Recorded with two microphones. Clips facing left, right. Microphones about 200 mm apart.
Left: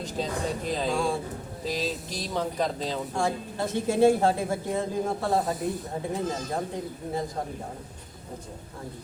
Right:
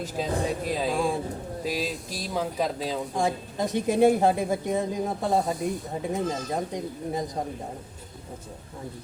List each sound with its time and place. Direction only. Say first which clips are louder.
0.0 s a woman's voice: right 2 dB; 5° right (ahead or behind)